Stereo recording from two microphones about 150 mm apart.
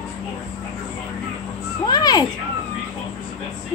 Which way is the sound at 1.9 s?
25° left (ahead or behind).